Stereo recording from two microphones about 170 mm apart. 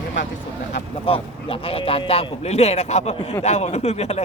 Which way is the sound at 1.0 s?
35° left (ahead or behind).